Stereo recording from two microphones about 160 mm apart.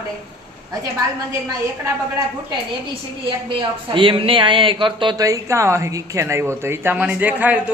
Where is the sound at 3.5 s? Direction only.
30° right (ahead or behind); by 7.7 s 10° right (ahead or behind).